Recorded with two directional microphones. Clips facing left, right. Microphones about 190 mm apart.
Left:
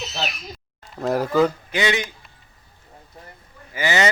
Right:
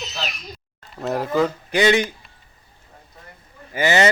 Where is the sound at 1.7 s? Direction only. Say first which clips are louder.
Right 5 dB; 45° right (ahead or behind).